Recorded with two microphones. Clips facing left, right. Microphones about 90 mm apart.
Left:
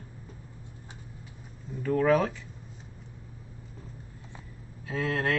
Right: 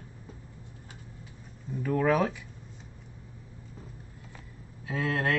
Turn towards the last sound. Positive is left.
turn(degrees=-5)  # may be behind; listen again after turning